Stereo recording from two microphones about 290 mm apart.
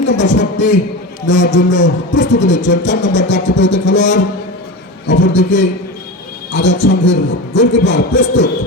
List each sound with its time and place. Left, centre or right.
0.0 s a man's voice: left